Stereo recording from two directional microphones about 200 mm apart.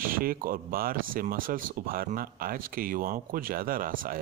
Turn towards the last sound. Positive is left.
turn(degrees=-45)  # may be behind; listen again after turning